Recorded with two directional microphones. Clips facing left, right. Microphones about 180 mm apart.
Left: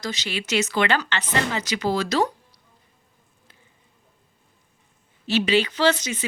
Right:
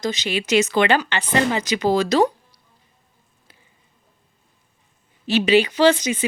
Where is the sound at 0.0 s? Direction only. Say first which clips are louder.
Right 6 dB; 20° right (ahead or behind).